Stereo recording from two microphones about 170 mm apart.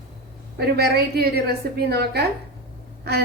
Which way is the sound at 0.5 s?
65° right (ahead or behind).